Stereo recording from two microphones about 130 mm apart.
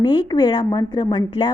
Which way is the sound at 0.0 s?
35° left (ahead or behind).